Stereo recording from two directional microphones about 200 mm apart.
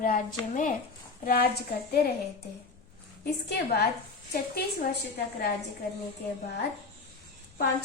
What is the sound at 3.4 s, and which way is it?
A woman's voice, 55° left (ahead or behind).